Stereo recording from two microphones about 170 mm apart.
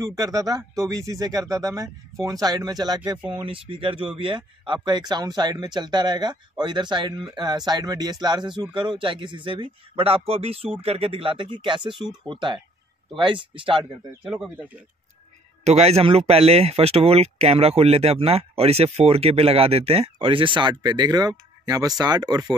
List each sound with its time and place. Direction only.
0.0 s speech: 20° right (ahead or behind)
14.2 s speech: 5° right (ahead or behind)
15.6 s speech: 40° right (ahead or behind); by 22.6 s 25° right (ahead or behind)